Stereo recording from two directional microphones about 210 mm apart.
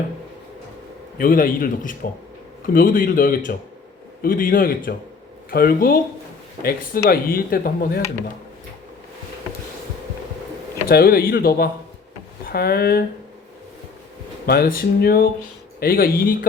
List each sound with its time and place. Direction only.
1.2 s a man's voice: 40° left (ahead or behind)
10.8 s speech: 45° left (ahead or behind)
14.4 s speech: 45° left (ahead or behind)